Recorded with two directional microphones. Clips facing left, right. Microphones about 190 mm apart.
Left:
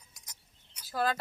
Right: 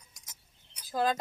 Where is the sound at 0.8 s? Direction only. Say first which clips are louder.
Right 2 dB; 15° right (ahead or behind).